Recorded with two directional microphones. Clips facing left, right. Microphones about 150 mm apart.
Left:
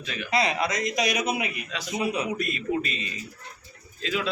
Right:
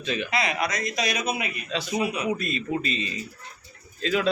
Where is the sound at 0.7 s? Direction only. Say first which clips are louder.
Left 2 dB; 20° left (ahead or behind).